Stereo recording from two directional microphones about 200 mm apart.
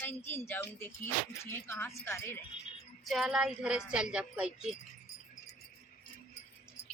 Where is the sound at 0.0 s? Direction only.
10° left (ahead or behind).